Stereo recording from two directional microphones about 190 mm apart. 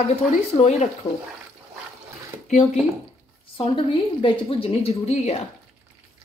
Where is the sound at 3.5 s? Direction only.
25° left (ahead or behind).